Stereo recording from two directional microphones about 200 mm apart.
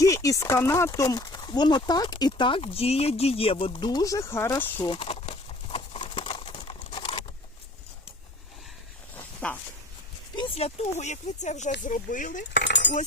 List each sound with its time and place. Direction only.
0.0 s speech: 15° left (ahead or behind)
4.8 s crumpling: 25° left (ahead or behind)
9.1 s a sound: 5° left (ahead or behind)
10.3 s speech: 30° left (ahead or behind)
12.5 s cutlery: 60° left (ahead or behind)